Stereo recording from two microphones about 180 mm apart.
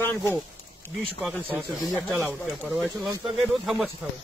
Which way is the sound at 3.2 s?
Centre (ahead or behind).